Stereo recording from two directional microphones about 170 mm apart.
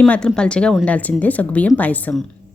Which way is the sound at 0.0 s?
5° left (ahead or behind).